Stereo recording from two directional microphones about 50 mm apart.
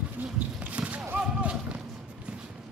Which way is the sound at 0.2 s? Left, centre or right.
Right.